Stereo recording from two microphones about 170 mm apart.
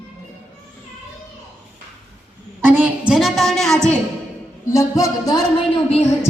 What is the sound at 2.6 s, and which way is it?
Speech, 10° right (ahead or behind).